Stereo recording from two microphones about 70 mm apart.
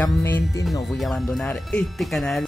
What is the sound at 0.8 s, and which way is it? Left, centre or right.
Speech, centre.